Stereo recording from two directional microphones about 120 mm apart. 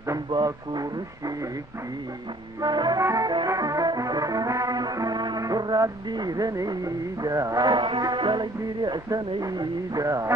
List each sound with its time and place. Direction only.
0.1 s music: 35° right (ahead or behind)
2.6 s music: 35° right (ahead or behind)